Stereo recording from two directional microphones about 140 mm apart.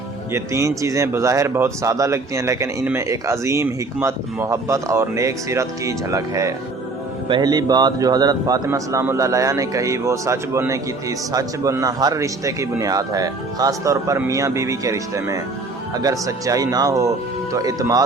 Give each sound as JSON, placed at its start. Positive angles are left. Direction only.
{"t": 0.3, "sound": "speech", "side_deg": -20}